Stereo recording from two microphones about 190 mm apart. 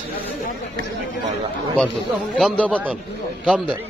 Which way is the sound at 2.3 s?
5° left (ahead or behind).